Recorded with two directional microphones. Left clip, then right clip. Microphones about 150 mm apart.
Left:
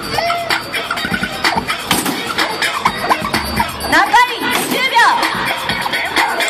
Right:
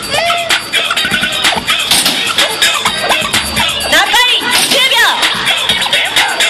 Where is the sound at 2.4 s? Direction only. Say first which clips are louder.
Right 3 dB; 35° right (ahead or behind).